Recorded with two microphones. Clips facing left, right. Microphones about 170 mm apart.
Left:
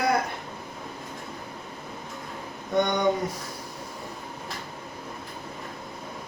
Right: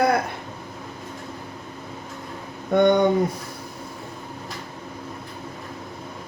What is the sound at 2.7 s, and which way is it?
Speech, 60° right (ahead or behind).